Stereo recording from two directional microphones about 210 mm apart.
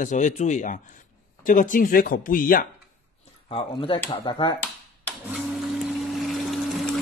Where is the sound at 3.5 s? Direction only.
25° left (ahead or behind).